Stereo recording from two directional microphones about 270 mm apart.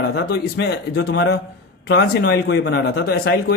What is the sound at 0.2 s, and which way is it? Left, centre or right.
Speech, left.